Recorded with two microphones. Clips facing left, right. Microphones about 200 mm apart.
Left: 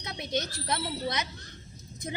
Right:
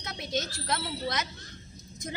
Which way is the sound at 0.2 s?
20° left (ahead or behind).